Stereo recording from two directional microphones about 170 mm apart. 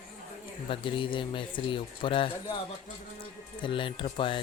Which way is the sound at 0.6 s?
30° left (ahead or behind).